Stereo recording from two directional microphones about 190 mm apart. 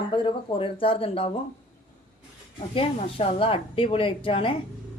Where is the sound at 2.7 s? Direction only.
30° left (ahead or behind).